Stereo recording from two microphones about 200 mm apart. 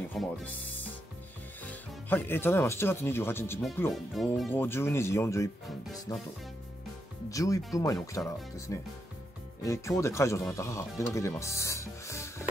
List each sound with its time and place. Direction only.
0.2 s speech: 5° left (ahead or behind)
3.9 s speech: centre (ahead or behind)
4.5 s speech: 10° left (ahead or behind)
7.2 s speech: 15° left (ahead or behind)